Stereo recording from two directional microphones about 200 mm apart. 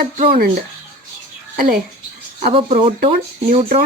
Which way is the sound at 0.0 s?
45° right (ahead or behind).